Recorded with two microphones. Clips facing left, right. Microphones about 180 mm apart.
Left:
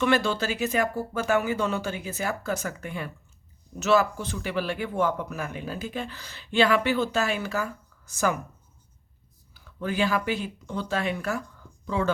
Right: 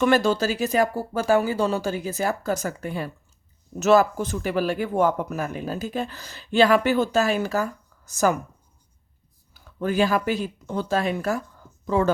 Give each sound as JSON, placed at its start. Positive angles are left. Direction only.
{"t": 0.0, "sound": "speech", "side_deg": -40}
{"t": 9.8, "sound": "speech", "side_deg": -40}